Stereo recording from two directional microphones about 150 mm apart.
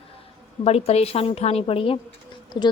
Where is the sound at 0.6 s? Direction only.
40° left (ahead or behind).